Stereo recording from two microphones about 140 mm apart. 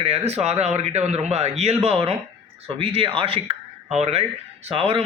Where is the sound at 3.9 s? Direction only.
50° right (ahead or behind).